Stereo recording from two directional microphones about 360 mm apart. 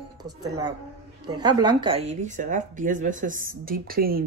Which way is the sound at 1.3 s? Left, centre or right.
Centre.